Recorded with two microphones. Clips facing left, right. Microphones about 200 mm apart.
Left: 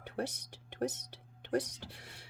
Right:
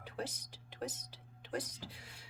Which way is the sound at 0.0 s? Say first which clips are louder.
Left 5 dB; 65° left (ahead or behind).